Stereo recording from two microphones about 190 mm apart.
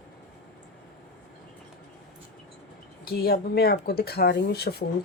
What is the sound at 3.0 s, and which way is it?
Speech, 55° left (ahead or behind).